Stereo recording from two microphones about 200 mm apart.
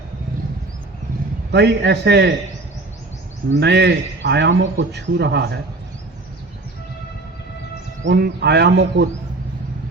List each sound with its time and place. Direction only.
1.5 s a man's voice: 60° right (ahead or behind)
3.5 s a man's voice: 60° right (ahead or behind)
8.0 s a man's voice: 55° right (ahead or behind)